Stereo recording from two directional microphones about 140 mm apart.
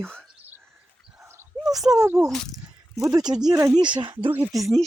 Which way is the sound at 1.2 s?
20° right (ahead or behind).